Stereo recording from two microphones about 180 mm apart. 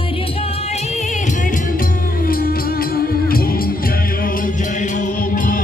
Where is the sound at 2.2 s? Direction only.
55° left (ahead or behind).